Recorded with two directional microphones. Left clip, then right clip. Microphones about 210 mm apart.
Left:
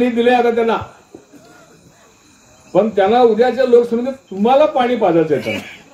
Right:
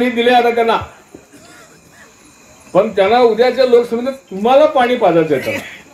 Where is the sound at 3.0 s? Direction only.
25° left (ahead or behind).